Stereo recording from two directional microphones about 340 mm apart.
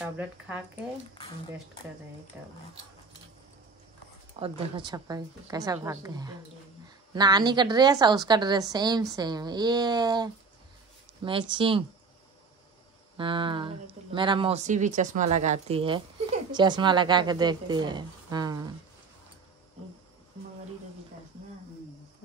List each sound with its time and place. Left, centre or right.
2.3 s speech: centre
4.4 s a woman's voice: centre
13.2 s a woman's voice: centre